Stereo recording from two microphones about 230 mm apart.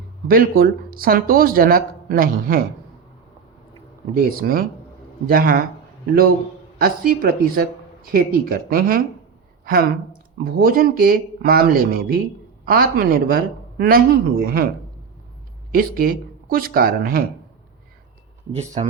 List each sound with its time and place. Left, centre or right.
0.3 s speech: right
4.4 s speech: right
6.7 s speech: right
10.3 s speech: right
15.7 s speech: right
18.5 s speech: right